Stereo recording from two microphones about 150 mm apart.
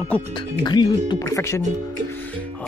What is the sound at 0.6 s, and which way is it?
Speech, 30° left (ahead or behind).